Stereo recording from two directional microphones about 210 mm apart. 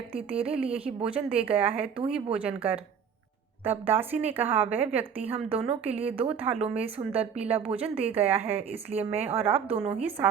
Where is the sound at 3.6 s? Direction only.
10° right (ahead or behind).